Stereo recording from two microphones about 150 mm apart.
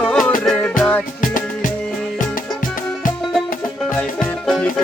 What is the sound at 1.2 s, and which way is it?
Music, 65° left (ahead or behind).